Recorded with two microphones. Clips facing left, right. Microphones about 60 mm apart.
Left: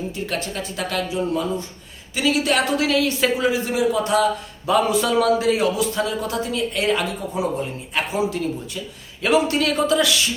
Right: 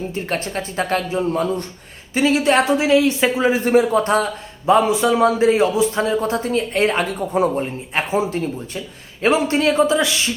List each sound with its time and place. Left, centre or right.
0.1 s a man's voice: right
3.5 s a man's voice: right